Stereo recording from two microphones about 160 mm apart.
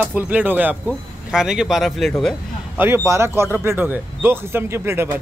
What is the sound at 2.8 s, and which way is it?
A man's voice, 15° right (ahead or behind).